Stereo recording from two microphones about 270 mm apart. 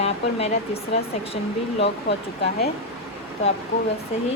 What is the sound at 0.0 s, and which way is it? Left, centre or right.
Speech, left.